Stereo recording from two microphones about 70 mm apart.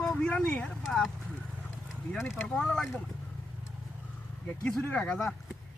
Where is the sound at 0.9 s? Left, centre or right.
Centre.